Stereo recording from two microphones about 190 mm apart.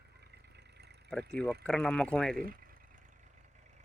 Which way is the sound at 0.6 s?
60° right (ahead or behind).